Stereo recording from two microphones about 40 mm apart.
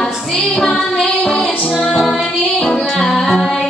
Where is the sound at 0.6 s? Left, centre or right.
Centre.